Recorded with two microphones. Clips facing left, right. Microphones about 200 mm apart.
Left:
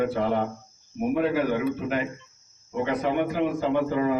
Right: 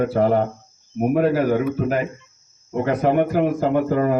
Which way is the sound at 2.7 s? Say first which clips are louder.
Right 6 dB; 50° right (ahead or behind).